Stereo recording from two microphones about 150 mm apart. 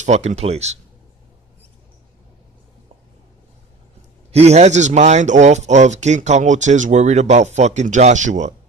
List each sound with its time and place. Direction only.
0.0 s speech: 50° right (ahead or behind)
4.3 s speech: 45° right (ahead or behind)